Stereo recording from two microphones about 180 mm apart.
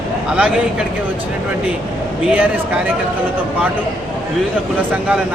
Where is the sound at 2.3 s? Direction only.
10° right (ahead or behind).